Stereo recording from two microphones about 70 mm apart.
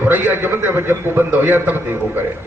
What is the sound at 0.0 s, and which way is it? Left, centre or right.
A man's voice, right.